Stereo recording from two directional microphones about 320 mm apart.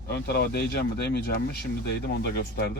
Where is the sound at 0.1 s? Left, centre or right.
Left.